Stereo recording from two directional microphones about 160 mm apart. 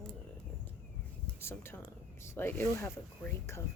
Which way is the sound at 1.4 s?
15° left (ahead or behind).